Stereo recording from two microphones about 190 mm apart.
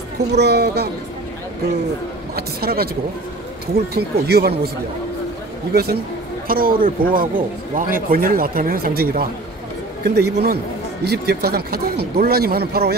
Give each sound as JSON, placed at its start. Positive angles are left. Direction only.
{"t": 0.3, "sound": "speech", "side_deg": -60}
{"t": 2.3, "sound": "speech", "side_deg": -55}
{"t": 6.4, "sound": "speech", "side_deg": -50}